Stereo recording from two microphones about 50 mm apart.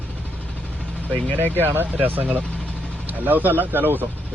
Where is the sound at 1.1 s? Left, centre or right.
Left.